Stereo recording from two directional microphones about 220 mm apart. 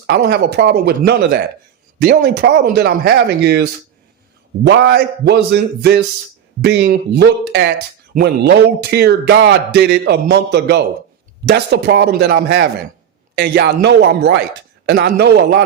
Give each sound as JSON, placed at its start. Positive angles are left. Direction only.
{"t": 0.1, "sound": "speech", "side_deg": -50}